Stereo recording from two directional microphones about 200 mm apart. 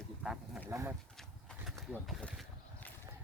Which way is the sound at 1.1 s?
Centre (ahead or behind).